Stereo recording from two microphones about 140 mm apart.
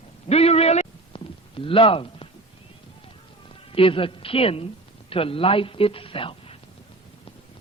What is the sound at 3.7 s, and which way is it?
A woman's voice, 40° left (ahead or behind).